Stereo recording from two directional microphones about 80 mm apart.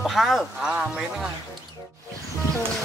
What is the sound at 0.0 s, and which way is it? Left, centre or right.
Speech, centre.